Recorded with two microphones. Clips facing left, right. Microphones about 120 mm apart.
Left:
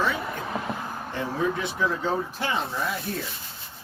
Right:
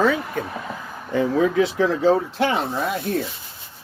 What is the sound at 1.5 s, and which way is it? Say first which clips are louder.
Speech: right 8 dB; 90° right.